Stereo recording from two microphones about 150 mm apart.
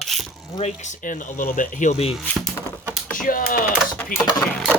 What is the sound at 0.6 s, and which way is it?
Speech, 50° left (ahead or behind).